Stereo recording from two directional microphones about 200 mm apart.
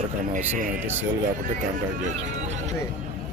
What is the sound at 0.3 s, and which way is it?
Speech, 40° right (ahead or behind).